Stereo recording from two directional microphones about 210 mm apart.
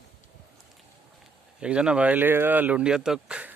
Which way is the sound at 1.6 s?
5° right (ahead or behind).